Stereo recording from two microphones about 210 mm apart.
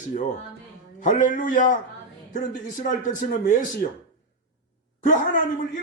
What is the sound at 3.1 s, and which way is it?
Speech, 35° left (ahead or behind).